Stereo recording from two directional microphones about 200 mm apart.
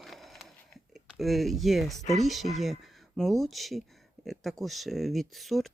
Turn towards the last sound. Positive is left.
turn(degrees=0)  # may be behind; listen again after turning